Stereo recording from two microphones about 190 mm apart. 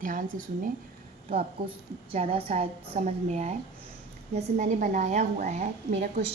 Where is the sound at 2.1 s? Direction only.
35° right (ahead or behind).